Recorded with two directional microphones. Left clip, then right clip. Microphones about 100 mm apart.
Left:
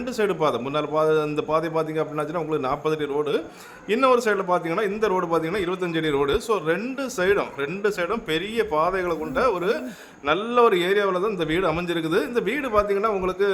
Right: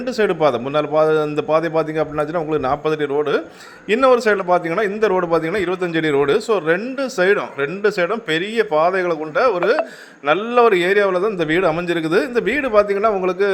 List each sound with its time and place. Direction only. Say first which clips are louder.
0.0 s a man's voice: right 6 dB; 25° right (ahead or behind)